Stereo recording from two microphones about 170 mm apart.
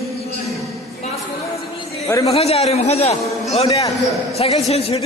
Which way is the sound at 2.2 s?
35° left (ahead or behind).